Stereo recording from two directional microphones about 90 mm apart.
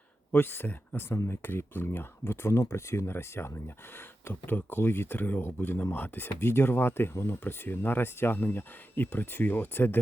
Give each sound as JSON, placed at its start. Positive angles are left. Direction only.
{"t": 0.3, "sound": "speech", "side_deg": 25}